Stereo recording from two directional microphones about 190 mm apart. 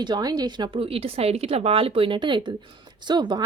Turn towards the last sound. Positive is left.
turn(degrees=-20)  # may be behind; listen again after turning